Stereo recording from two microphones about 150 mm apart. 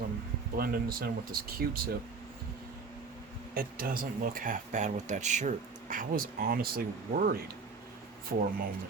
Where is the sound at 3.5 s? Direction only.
75° right (ahead or behind); by 7.4 s 90° right.